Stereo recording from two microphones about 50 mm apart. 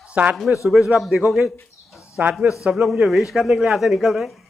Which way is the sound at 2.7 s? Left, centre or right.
Centre.